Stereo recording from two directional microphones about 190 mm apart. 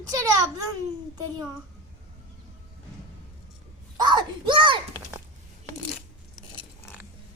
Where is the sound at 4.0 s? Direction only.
25° right (ahead or behind).